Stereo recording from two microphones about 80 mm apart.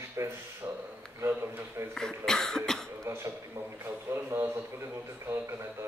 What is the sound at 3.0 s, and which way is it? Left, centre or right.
Speech, right.